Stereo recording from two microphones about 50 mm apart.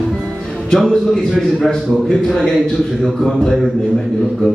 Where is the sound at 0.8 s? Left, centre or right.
Centre.